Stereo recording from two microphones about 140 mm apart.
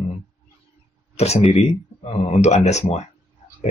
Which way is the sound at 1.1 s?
50° left (ahead or behind).